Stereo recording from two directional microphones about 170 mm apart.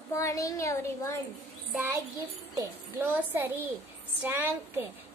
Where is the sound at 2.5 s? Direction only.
15° right (ahead or behind).